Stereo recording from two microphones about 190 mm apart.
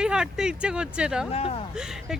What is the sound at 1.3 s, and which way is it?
Speech, 30° left (ahead or behind).